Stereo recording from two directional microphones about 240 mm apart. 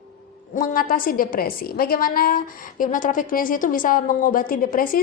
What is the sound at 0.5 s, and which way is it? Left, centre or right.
A woman's voice, left.